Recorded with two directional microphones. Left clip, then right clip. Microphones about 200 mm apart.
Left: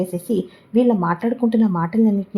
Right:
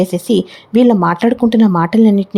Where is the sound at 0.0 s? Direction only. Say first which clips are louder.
Right 8 dB; 25° right (ahead or behind).